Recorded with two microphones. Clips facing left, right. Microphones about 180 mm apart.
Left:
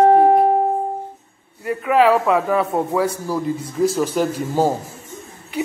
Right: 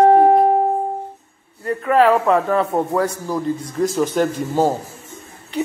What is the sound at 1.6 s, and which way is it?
A man's voice, 5° left (ahead or behind).